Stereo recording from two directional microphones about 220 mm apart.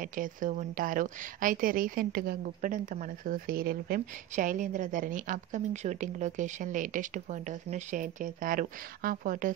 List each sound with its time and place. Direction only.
0.1 s speech: 35° right (ahead or behind)